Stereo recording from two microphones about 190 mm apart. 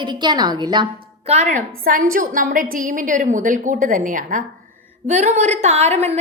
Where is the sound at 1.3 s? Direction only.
40° right (ahead or behind).